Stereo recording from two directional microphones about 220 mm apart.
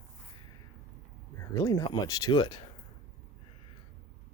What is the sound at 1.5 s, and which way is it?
Speech, 15° left (ahead or behind).